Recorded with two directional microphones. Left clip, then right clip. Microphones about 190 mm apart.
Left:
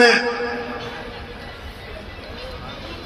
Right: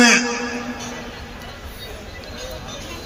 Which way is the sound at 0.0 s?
60° right (ahead or behind).